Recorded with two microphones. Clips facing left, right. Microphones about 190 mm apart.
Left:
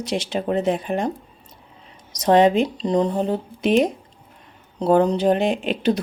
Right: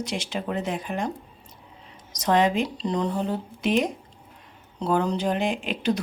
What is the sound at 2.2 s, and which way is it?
Speech, 20° left (ahead or behind).